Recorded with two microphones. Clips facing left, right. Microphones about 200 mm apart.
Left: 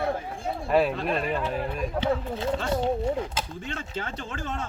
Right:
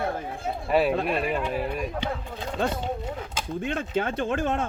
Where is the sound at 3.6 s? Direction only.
55° right (ahead or behind).